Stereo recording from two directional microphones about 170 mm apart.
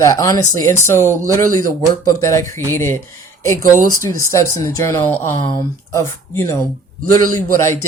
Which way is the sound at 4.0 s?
20° left (ahead or behind).